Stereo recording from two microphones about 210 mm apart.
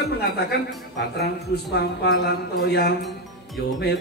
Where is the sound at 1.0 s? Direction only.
50° left (ahead or behind).